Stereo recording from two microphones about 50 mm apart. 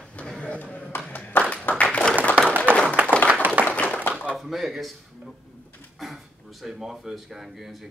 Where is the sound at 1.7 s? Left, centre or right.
Left.